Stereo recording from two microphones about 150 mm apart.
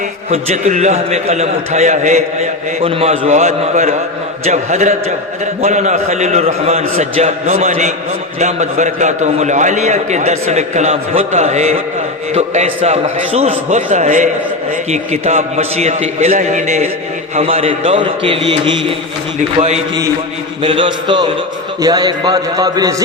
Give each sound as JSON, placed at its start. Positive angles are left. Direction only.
{"t": 0.3, "sound": "a man's voice", "side_deg": -50}
{"t": 19.4, "sound": "a man's voice", "side_deg": -50}
{"t": 20.6, "sound": "a man's voice", "side_deg": -35}